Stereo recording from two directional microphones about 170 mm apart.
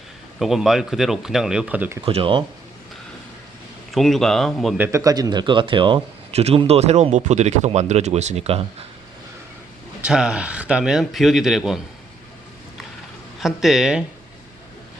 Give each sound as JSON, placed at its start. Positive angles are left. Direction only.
{"t": 0.3, "sound": "a man's voice", "side_deg": 0}
{"t": 2.0, "sound": "speech", "side_deg": -30}
{"t": 3.9, "sound": "a man's voice", "side_deg": 0}
{"t": 4.8, "sound": "speech", "side_deg": -15}
{"t": 10.1, "sound": "a man's voice", "side_deg": -5}
{"t": 13.4, "sound": "a man's voice", "side_deg": 0}